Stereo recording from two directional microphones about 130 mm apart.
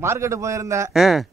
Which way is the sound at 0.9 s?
Centre (ahead or behind).